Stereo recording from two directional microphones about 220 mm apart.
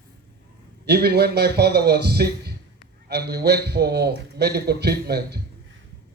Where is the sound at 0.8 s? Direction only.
45° right (ahead or behind).